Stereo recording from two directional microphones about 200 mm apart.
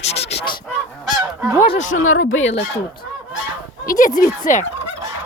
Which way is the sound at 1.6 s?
40° left (ahead or behind).